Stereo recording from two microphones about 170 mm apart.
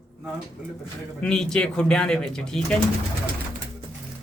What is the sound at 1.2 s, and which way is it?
Speech, 5° left (ahead or behind).